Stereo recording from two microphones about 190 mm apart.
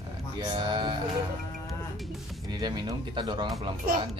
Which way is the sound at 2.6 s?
20° right (ahead or behind).